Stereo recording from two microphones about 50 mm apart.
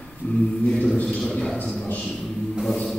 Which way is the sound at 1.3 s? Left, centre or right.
Centre.